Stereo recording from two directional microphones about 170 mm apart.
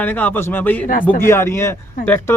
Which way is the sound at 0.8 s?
55° left (ahead or behind).